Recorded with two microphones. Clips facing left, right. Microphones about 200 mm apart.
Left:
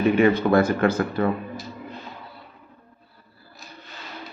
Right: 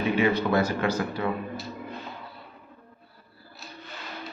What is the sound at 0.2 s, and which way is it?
Speech, 50° left (ahead or behind).